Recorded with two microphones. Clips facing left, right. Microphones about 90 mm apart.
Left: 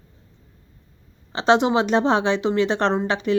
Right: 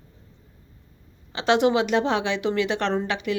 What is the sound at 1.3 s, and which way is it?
A woman's voice, 25° left (ahead or behind).